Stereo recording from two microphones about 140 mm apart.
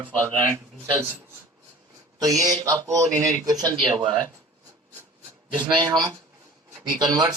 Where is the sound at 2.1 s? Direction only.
25° right (ahead or behind).